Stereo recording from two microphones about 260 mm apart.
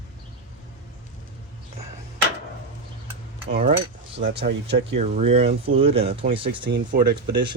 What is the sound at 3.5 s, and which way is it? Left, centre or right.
Cutlery, right.